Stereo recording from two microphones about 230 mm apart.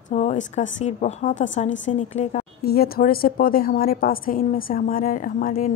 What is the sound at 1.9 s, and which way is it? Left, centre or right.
Speech, left.